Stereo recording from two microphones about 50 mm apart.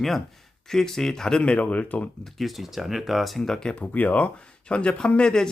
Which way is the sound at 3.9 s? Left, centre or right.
Left.